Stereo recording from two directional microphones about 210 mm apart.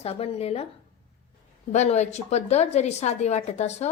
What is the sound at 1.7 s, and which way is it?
A woman's voice, 35° left (ahead or behind).